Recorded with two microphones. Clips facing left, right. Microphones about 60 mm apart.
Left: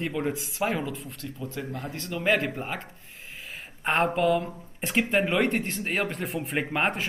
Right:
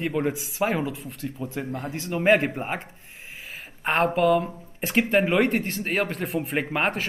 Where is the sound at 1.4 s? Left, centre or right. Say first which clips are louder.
Right 3 dB; right.